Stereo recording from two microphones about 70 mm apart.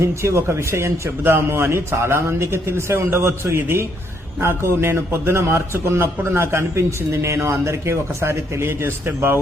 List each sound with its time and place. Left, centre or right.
0.0 s a man's voice: right